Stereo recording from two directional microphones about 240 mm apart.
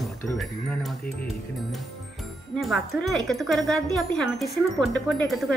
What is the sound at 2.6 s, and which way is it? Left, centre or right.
Speech, centre.